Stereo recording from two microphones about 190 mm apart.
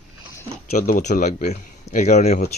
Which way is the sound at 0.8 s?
45° left (ahead or behind).